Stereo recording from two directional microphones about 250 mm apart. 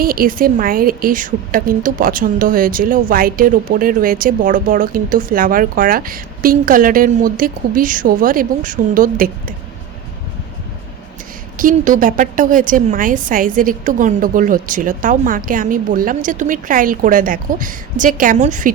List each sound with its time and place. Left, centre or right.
0.0 s a woman's voice: right
11.5 s a woman's voice: right